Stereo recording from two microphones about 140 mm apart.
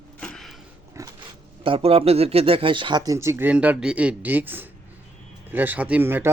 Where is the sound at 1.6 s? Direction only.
40° right (ahead or behind).